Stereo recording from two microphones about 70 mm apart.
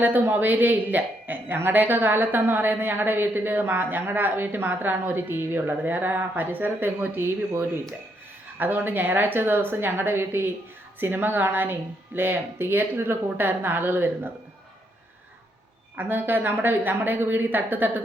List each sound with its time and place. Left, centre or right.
0.0 s a woman's voice: right
16.0 s a woman's voice: right